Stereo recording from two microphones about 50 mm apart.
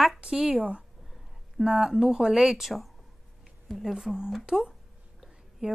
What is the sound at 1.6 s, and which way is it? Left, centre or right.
Speech, centre.